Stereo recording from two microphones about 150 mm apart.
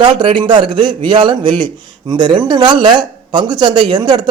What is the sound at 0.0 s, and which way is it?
A man's voice, 35° right (ahead or behind).